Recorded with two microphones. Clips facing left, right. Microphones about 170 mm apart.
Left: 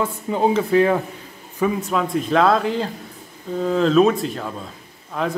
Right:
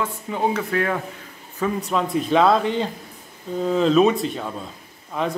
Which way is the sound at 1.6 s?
Centre (ahead or behind).